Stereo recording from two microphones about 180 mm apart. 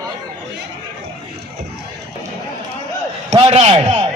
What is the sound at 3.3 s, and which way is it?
Speech, 30° right (ahead or behind).